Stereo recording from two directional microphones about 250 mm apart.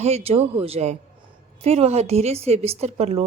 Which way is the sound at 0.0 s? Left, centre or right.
Right.